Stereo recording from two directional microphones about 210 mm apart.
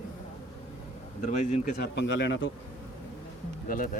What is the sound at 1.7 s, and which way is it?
Speech, 55° left (ahead or behind).